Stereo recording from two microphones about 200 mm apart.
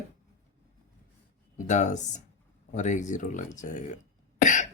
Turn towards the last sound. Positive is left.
turn(degrees=40)  # may be behind; listen again after turning